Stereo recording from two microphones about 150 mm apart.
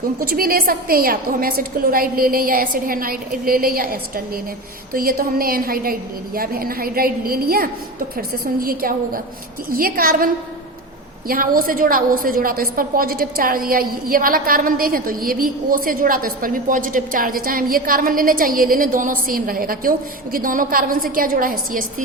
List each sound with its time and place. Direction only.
0.2 s a woman's voice: 80° right
4.9 s a woman's voice: 75° right (ahead or behind)
11.3 s a woman's voice: 75° right (ahead or behind)